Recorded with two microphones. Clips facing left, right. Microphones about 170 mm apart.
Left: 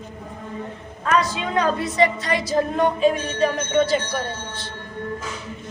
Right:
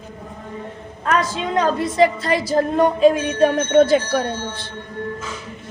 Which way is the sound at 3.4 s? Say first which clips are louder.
Right 6 dB; 55° right (ahead or behind).